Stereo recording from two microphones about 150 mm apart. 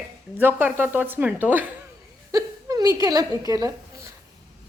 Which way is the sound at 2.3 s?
25° right (ahead or behind).